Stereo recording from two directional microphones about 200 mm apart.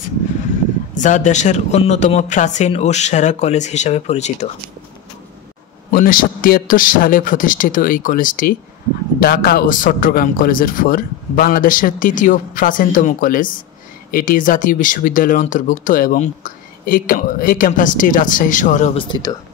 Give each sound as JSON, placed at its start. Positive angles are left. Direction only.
{"t": 0.9, "sound": "speech", "side_deg": 40}
{"t": 5.9, "sound": "a man's voice", "side_deg": 45}
{"t": 18.9, "sound": "speech", "side_deg": 25}